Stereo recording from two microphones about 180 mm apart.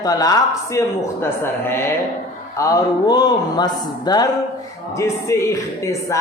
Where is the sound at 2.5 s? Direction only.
20° left (ahead or behind).